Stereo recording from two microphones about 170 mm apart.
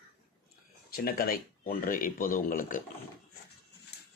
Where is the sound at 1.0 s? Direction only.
60° left (ahead or behind).